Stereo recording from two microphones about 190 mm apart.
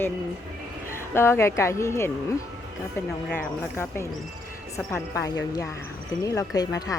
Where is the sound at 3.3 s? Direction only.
15° left (ahead or behind).